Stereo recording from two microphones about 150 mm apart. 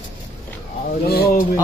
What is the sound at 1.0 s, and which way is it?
Speech, 90° left.